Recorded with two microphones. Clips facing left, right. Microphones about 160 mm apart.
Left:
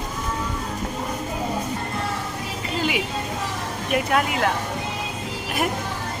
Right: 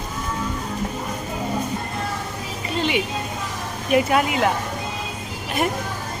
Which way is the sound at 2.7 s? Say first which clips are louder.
Right 2 dB; 5° left (ahead or behind).